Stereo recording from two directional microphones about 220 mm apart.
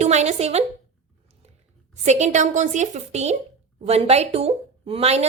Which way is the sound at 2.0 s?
30° right (ahead or behind).